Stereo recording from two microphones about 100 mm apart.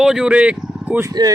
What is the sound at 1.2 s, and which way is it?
Speech, 40° right (ahead or behind).